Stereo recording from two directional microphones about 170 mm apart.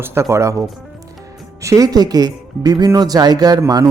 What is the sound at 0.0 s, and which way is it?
Speech, 15° right (ahead or behind).